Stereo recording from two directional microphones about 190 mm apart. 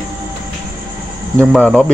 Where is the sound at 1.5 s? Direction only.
5° left (ahead or behind).